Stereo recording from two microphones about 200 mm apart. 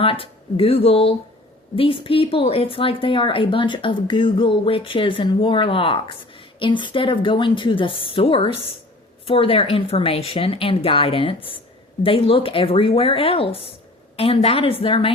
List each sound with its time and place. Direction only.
0.0 s speech: 25° left (ahead or behind)